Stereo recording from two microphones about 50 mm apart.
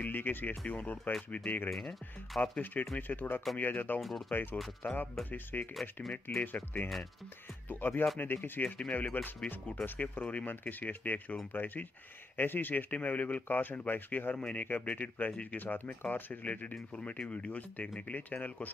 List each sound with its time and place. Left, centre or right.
0.0 s speech: left
1.7 s speech: centre
2.6 s speech: left
8.6 s speech: centre
8.9 s speech: left
14.4 s speech: left
16.9 s speech: left